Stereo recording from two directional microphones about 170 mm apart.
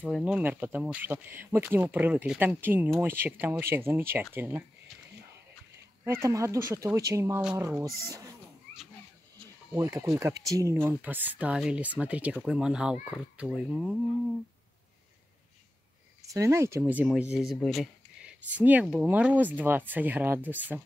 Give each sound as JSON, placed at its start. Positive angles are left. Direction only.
{"t": 0.0, "sound": "speech", "side_deg": -5}
{"t": 6.0, "sound": "speech", "side_deg": -15}
{"t": 9.8, "sound": "speech", "side_deg": -20}
{"t": 16.2, "sound": "speech", "side_deg": -20}